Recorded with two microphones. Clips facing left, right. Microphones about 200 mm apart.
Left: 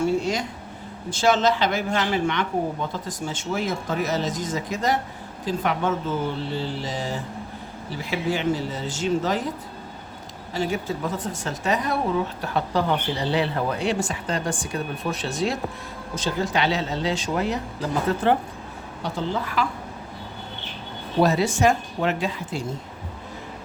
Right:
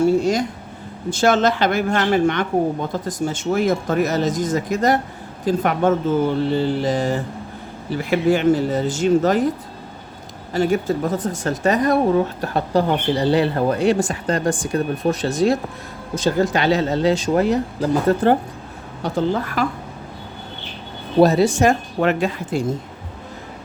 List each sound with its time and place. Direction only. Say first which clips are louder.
0.0 s speech: right 6 dB; 40° right (ahead or behind)
10.5 s speech: right 7 dB; 50° right (ahead or behind)
21.2 s speech: right 6 dB; 35° right (ahead or behind); by 22.6 s 50° right (ahead or behind)